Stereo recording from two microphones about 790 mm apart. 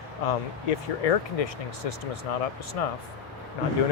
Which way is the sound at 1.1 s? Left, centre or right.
Left.